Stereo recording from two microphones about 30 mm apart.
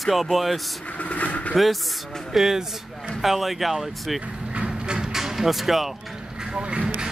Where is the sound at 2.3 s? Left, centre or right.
Centre.